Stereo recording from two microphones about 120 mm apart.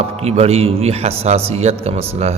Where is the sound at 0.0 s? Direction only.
60° right (ahead or behind).